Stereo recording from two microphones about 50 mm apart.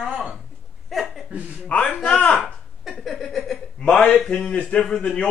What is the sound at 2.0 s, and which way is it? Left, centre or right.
Speech, centre.